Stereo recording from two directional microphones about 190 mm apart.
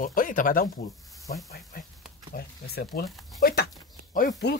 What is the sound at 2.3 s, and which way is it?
Speech, 55° left (ahead or behind).